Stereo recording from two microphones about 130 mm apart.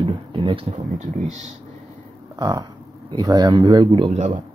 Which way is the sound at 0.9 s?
65° right (ahead or behind).